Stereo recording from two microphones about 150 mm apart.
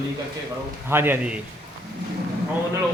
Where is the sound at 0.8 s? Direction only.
15° right (ahead or behind).